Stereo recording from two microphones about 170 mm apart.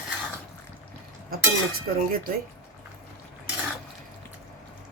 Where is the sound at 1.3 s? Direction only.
60° right (ahead or behind).